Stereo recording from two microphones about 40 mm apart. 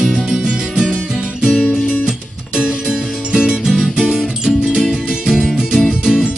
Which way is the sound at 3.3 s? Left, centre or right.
Right.